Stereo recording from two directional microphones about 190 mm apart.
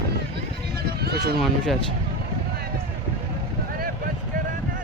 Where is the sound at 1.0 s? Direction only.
55° right (ahead or behind).